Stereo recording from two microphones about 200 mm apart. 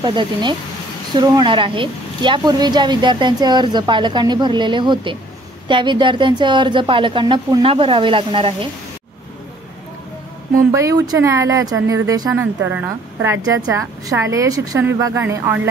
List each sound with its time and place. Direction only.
0.0 s speech: 20° right (ahead or behind)
10.7 s speech: 15° right (ahead or behind)